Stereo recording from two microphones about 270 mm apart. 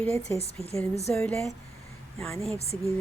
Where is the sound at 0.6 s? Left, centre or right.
Right.